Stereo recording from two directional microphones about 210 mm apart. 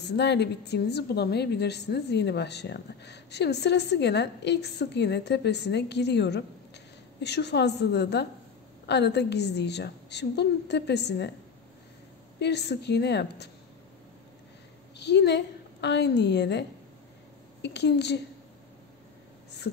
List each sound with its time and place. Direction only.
0.1 s a woman's voice: 55° left (ahead or behind)
12.4 s a woman's voice: 55° left (ahead or behind)
15.0 s a woman's voice: 55° left (ahead or behind)